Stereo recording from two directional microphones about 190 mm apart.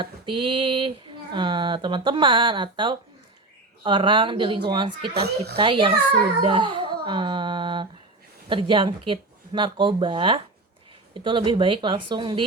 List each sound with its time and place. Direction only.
0.0 s speech: 25° right (ahead or behind)
5.1 s speech: 60° right (ahead or behind)
5.5 s speech: 25° right (ahead or behind)